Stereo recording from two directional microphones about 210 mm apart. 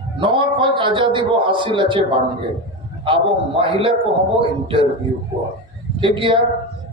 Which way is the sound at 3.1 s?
25° right (ahead or behind).